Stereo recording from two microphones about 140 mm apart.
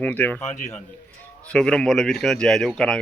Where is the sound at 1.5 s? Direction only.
5° left (ahead or behind).